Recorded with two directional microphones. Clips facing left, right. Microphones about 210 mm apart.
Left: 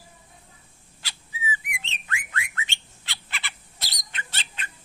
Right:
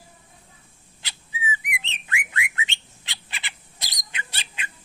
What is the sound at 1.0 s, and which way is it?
Bird, 20° right (ahead or behind).